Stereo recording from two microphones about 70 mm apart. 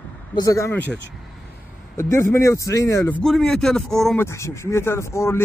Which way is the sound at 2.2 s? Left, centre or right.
Left.